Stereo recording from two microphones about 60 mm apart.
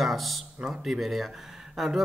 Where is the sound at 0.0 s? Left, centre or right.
Centre.